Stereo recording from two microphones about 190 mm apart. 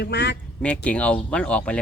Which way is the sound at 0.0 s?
60° left (ahead or behind).